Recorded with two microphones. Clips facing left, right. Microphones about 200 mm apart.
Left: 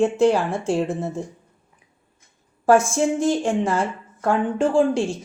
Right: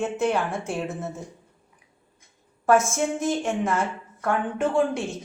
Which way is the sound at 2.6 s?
30° left (ahead or behind).